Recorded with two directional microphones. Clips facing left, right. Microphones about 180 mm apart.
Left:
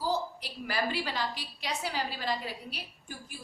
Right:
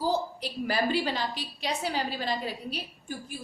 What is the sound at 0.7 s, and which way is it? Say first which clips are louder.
A woman's voice: right 5 dB; 25° right (ahead or behind).